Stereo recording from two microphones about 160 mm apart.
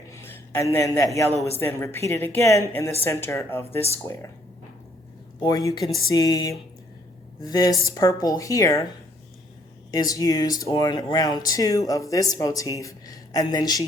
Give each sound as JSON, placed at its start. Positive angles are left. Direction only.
{"t": 0.1, "sound": "a man's voice", "side_deg": 15}
{"t": 5.4, "sound": "speech", "side_deg": 25}
{"t": 9.9, "sound": "speech", "side_deg": 20}